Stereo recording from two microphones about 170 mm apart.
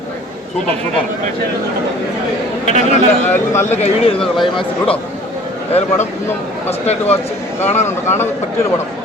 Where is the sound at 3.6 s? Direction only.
40° left (ahead or behind).